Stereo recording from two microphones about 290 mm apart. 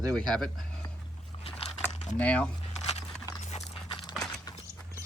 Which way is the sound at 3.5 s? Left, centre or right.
Left.